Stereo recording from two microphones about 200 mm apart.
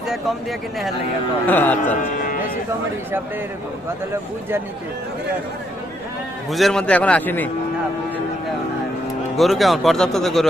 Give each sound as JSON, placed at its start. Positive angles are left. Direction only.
{"t": 1.5, "sound": "a man's voice", "side_deg": 10}
{"t": 2.0, "sound": "cattle", "side_deg": 45}
{"t": 6.5, "sound": "a man's voice", "side_deg": 0}
{"t": 9.4, "sound": "speech", "side_deg": 0}